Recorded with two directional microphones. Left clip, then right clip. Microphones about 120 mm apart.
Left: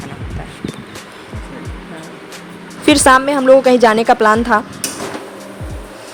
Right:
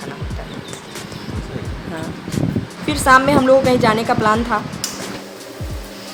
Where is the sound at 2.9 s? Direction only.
80° left.